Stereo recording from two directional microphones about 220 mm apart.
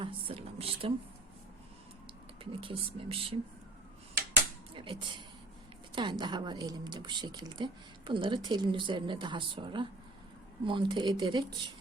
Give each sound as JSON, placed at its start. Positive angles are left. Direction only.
{"t": 0.0, "sound": "speech", "side_deg": -25}
{"t": 2.4, "sound": "a woman's voice", "side_deg": -25}
{"t": 4.7, "sound": "a woman's voice", "side_deg": -20}